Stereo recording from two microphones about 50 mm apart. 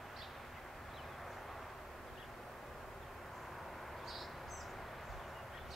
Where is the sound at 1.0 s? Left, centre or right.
Centre.